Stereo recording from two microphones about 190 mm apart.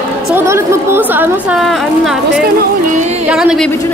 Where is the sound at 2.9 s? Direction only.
40° right (ahead or behind).